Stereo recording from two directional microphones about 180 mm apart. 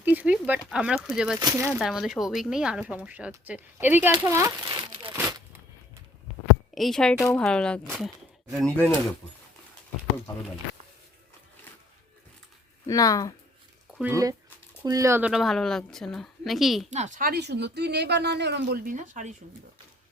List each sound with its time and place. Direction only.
0.0 s a sound: 10° right (ahead or behind)
0.7 s a woman's voice: 5° right (ahead or behind); by 4.9 s 25° right (ahead or behind)
6.7 s a woman's voice: centre (ahead or behind)
12.9 s speech: 20° left (ahead or behind)
14.0 s speech: 15° right (ahead or behind)
15.3 s a woman's voice: centre (ahead or behind)
16.9 s speech: 40° right (ahead or behind); by 18.8 s 70° right (ahead or behind)
18.9 s speech: 45° right (ahead or behind)